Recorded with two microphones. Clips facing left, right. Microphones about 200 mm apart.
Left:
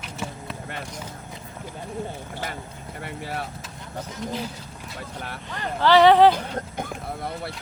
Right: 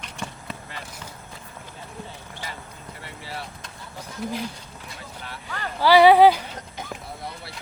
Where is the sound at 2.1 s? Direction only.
55° left (ahead or behind).